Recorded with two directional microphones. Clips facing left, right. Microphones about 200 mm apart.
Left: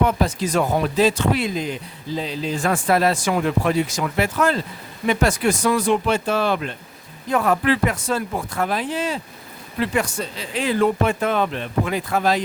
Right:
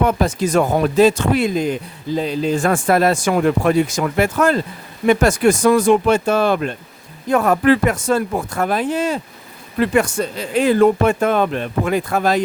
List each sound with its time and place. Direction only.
0.0 s speech: 50° right (ahead or behind)